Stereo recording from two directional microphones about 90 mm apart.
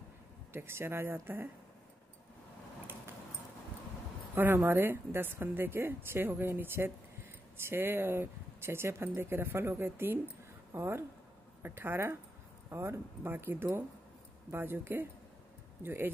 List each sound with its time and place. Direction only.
0.5 s speech: 25° right (ahead or behind)
4.4 s speech: 25° right (ahead or behind)